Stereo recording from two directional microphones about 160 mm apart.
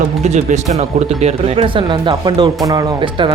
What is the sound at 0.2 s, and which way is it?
Speech, 45° right (ahead or behind).